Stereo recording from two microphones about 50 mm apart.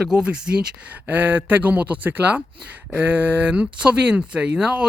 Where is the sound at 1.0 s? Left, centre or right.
Right.